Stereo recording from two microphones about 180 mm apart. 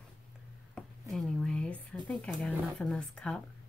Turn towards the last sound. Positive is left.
turn(degrees=5)  # may be behind; listen again after turning